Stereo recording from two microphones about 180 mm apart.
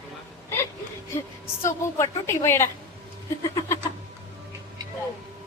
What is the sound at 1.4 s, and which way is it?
A woman's voice, 15° left (ahead or behind).